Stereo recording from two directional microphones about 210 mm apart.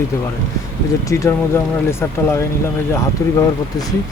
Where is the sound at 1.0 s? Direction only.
15° left (ahead or behind).